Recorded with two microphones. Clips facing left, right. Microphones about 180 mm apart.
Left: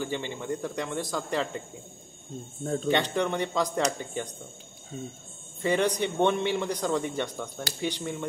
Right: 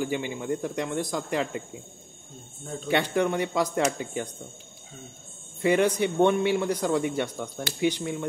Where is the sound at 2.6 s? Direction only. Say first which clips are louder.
Left 7 dB; 45° left (ahead or behind).